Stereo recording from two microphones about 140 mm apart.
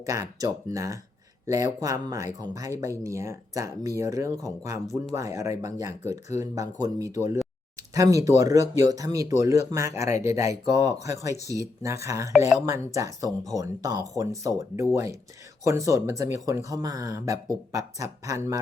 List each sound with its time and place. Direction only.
0.0 s speech: 25° right (ahead or behind)